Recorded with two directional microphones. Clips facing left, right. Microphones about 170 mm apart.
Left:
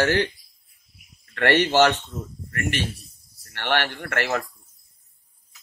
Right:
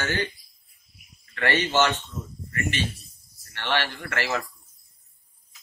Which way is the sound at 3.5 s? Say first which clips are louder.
Left 3 dB; 60° left (ahead or behind).